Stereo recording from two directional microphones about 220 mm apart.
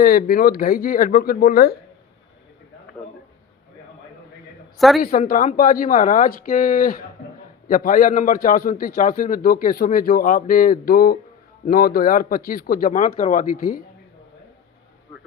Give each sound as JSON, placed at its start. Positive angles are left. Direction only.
{"t": 0.0, "sound": "a man's voice", "side_deg": 40}
{"t": 4.8, "sound": "a woman's voice", "side_deg": 0}
{"t": 5.3, "sound": "a man's voice", "side_deg": 40}